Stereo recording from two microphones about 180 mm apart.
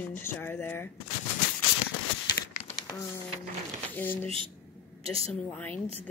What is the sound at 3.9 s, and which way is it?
Speech, 10° left (ahead or behind).